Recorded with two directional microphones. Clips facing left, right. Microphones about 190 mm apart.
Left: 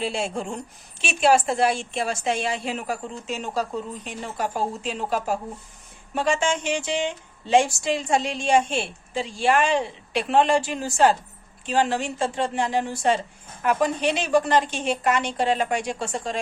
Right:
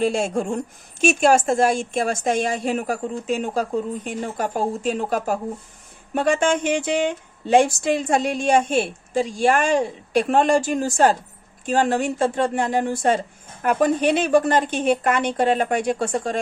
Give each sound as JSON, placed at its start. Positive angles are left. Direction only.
{"t": 0.0, "sound": "a woman's voice", "side_deg": -45}